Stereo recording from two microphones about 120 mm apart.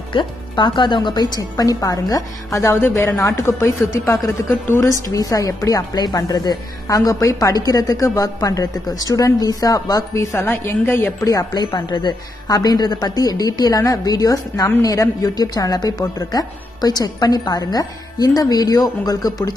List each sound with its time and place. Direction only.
0.1 s a woman's voice: 40° left (ahead or behind)